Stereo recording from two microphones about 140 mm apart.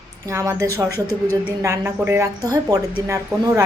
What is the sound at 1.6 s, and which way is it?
Speech, 20° right (ahead or behind).